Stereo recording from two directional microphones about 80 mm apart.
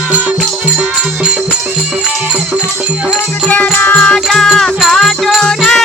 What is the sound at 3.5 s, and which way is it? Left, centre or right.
Music, centre.